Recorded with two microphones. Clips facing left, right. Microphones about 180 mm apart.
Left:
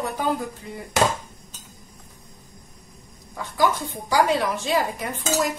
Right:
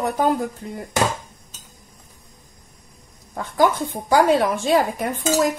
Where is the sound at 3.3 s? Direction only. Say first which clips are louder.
Right 4 dB; 50° right (ahead or behind).